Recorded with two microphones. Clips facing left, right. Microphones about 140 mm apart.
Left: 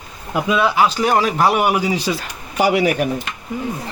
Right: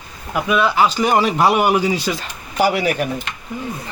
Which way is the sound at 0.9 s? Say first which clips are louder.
Right 1 dB; centre (ahead or behind).